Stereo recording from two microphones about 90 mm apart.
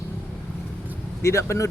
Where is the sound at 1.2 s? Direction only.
35° left (ahead or behind).